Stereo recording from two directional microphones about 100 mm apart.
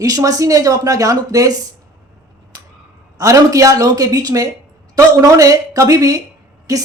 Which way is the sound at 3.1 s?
35° right (ahead or behind).